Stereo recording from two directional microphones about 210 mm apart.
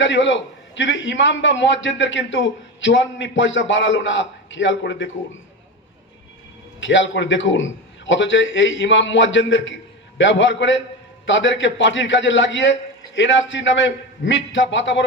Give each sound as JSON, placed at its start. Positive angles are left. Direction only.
{"t": 0.0, "sound": "a man's voice", "side_deg": 60}
{"t": 6.7, "sound": "a man's voice", "side_deg": 60}